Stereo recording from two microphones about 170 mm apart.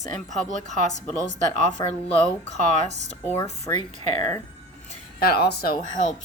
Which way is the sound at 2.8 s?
40° right (ahead or behind).